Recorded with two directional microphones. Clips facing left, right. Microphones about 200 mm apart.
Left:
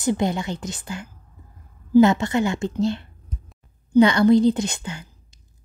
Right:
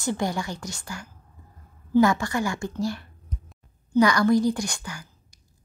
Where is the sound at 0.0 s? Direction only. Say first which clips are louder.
Left 5 dB; 20° left (ahead or behind).